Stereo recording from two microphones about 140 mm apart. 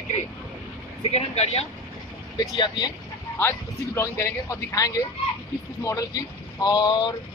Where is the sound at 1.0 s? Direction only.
45° left (ahead or behind).